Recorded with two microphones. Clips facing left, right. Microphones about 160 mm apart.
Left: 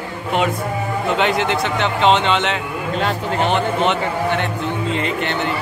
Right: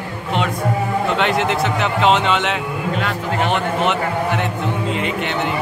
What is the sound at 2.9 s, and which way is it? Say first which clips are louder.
Speech: left 3 dB; 35° left (ahead or behind).